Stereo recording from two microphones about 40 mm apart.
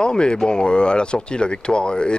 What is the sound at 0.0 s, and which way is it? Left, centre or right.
Speech, left.